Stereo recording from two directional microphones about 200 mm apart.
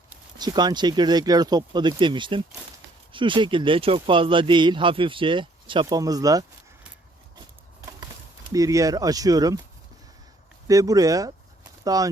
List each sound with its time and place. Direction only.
0.3 s speech: 20° right (ahead or behind)
8.5 s speech: 15° right (ahead or behind)
10.7 s speech: 15° right (ahead or behind)